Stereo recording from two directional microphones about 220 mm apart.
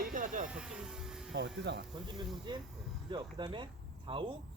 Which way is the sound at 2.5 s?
20° right (ahead or behind).